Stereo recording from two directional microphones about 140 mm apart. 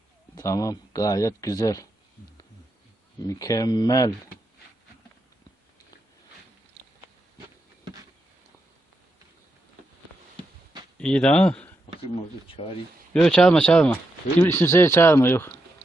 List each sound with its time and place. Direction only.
0.3 s speech: 25° left (ahead or behind)
3.2 s speech: 25° left (ahead or behind)
11.0 s speech: 10° left (ahead or behind)
13.1 s speech: 5° left (ahead or behind)